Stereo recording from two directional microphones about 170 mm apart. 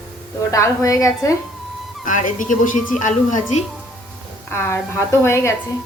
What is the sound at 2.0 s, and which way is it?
Speech, 50° left (ahead or behind).